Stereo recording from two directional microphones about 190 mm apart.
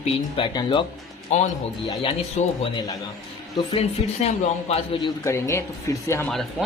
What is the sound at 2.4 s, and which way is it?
Speech, 40° left (ahead or behind).